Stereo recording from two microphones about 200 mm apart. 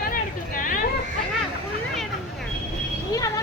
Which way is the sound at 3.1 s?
15° left (ahead or behind).